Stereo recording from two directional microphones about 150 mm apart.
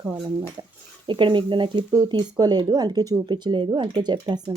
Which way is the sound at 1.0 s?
30° right (ahead or behind).